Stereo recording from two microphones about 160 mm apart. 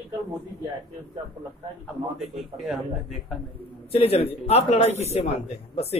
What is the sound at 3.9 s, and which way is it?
A man's voice, 40° left (ahead or behind).